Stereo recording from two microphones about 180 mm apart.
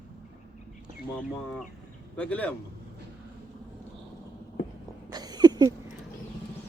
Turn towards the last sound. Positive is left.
turn(degrees=-20)  # may be behind; listen again after turning